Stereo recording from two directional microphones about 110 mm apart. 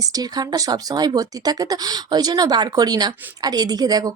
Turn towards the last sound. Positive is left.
turn(degrees=-35)  # may be behind; listen again after turning